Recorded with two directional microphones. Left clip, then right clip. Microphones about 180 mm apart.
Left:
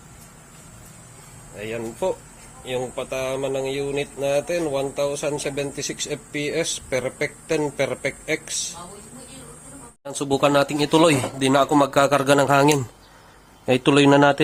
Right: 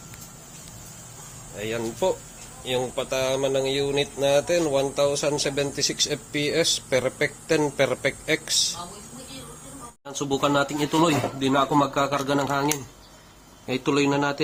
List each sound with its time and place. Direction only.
1.5 s speech: centre (ahead or behind)
10.0 s speech: 45° left (ahead or behind); by 12.8 s 90° left
13.7 s speech: 55° left (ahead or behind)